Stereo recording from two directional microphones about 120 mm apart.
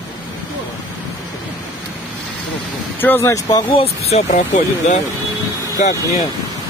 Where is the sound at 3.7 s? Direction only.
55° left (ahead or behind); by 6.2 s 75° left (ahead or behind).